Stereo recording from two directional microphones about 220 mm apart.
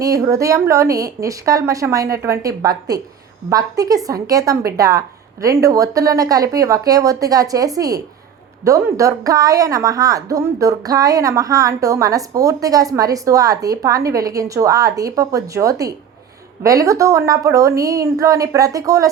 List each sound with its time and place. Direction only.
0.0 s a woman's voice: 15° right (ahead or behind)